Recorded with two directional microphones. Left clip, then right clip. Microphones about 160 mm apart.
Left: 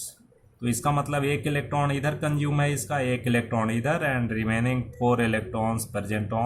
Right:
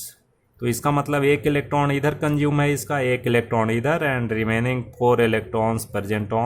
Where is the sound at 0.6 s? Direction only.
55° right (ahead or behind).